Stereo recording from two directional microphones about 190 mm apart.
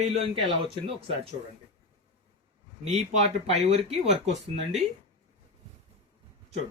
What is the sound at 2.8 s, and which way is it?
Speech, 35° right (ahead or behind).